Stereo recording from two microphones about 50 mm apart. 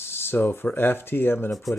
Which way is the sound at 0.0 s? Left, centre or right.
Left.